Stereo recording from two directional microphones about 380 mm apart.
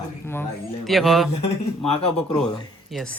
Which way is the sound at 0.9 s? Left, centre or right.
Centre.